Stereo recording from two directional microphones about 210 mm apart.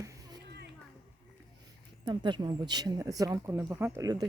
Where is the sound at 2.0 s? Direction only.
20° right (ahead or behind).